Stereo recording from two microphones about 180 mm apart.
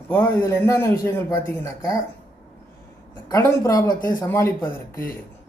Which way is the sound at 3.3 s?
20° left (ahead or behind).